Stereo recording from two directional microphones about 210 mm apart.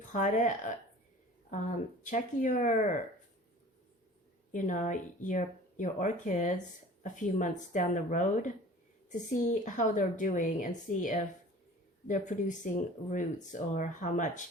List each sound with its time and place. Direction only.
0.0 s speech: 35° left (ahead or behind)
4.5 s speech: 35° left (ahead or behind)